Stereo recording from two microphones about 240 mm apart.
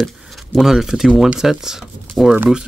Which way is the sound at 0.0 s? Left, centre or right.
Centre.